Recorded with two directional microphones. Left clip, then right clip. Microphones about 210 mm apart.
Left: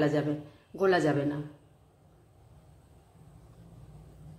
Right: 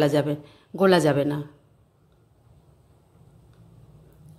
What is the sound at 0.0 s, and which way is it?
Speech, 50° right (ahead or behind).